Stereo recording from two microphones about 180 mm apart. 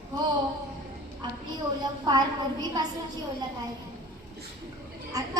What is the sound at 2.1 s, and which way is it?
Speech, 20° right (ahead or behind).